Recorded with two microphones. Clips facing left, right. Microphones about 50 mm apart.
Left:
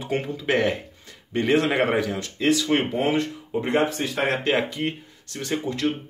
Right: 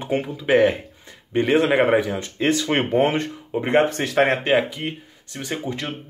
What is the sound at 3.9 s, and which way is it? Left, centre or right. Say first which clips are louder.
Speech: right 6 dB; right.